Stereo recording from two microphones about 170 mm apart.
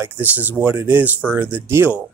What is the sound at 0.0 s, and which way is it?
Speech, 10° right (ahead or behind).